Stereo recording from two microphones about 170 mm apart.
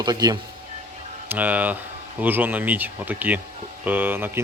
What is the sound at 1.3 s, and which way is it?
A man's voice, 10° right (ahead or behind).